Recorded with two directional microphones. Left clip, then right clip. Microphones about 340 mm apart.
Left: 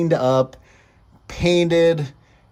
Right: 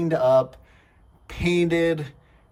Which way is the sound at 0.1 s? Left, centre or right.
Centre.